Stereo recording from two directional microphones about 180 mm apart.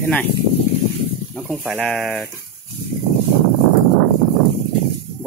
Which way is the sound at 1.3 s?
Centre (ahead or behind).